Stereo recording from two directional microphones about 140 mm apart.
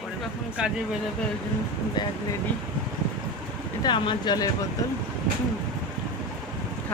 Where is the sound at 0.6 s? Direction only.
5° right (ahead or behind).